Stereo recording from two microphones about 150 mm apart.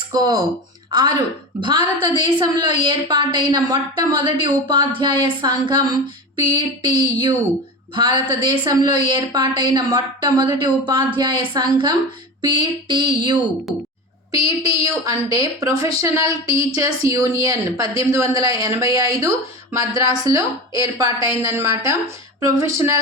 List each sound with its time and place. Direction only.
0.1 s a woman's voice: 25° right (ahead or behind)